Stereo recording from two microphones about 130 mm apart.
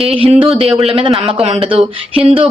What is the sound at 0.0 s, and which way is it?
Speech, 50° right (ahead or behind).